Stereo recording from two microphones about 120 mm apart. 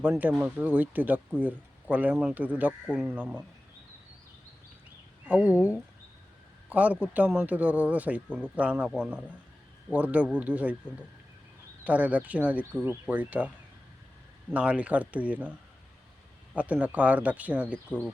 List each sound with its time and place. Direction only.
0.0 s a man's voice: 15° right (ahead or behind)
5.2 s a man's voice: 10° right (ahead or behind)
11.9 s a man's voice: 10° right (ahead or behind)
14.5 s a man's voice: 10° right (ahead or behind)
16.6 s a man's voice: 10° right (ahead or behind)